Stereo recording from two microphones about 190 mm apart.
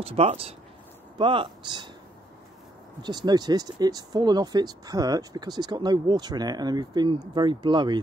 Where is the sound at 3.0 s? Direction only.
20° right (ahead or behind).